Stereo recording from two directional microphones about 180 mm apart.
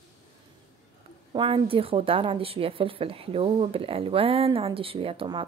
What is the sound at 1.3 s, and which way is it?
A woman's voice, 30° right (ahead or behind).